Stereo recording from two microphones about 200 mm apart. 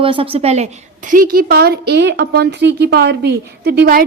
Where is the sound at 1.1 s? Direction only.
45° right (ahead or behind).